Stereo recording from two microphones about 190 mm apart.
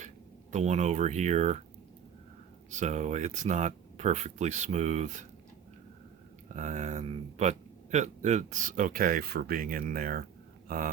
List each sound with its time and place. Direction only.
0.5 s speech: 35° right (ahead or behind)
2.6 s speech: 40° right (ahead or behind)
6.5 s speech: 40° right (ahead or behind)